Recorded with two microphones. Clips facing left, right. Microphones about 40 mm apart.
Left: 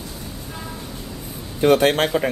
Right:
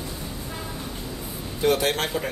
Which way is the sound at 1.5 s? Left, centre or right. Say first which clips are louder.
Left 7 dB; left.